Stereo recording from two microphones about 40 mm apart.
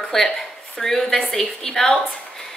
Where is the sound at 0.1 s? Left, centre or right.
Centre.